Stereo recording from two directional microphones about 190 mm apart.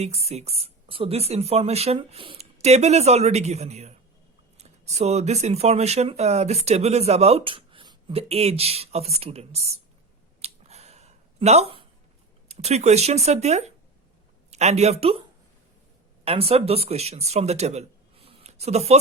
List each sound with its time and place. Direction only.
0.0 s speech: 35° right (ahead or behind)
10.4 s a sound: 35° right (ahead or behind)
12.5 s speech: 35° right (ahead or behind)
16.2 s speech: 30° right (ahead or behind)